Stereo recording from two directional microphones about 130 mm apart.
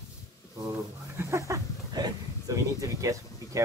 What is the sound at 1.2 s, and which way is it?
Speech, 20° right (ahead or behind).